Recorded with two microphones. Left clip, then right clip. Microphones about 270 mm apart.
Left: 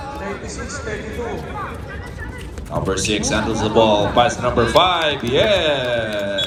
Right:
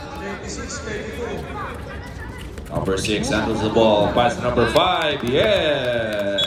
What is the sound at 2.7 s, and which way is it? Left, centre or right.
Speech, left.